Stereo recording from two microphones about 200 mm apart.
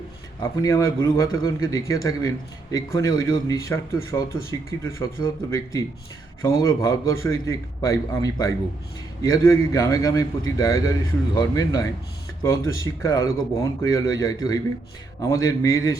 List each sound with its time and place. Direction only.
0.3 s speech: 15° left (ahead or behind)